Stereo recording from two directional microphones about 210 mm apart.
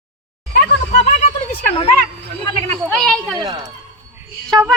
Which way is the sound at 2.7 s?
5° left (ahead or behind).